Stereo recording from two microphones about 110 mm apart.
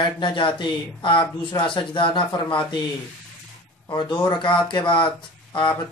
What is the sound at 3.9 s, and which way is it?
Speech, 45° left (ahead or behind).